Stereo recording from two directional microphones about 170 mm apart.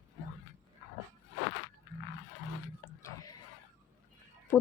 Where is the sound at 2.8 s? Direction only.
20° left (ahead or behind).